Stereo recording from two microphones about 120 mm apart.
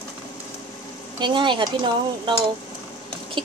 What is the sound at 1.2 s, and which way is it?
Speech, 40° right (ahead or behind).